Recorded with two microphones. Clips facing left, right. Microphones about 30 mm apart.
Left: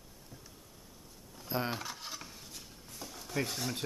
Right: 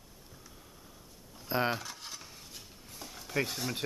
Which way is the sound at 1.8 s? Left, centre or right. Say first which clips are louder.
Left 2 dB; centre.